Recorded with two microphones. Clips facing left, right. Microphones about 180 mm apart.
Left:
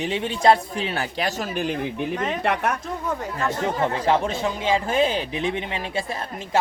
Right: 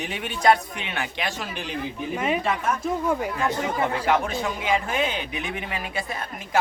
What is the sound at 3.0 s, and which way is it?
Speech, 10° right (ahead or behind).